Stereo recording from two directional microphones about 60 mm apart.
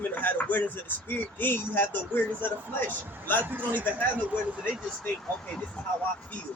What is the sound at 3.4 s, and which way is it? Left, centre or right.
Speech, right.